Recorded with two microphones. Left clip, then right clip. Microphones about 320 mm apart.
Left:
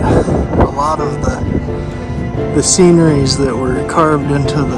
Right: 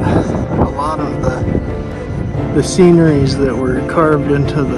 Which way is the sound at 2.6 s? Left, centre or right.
Centre.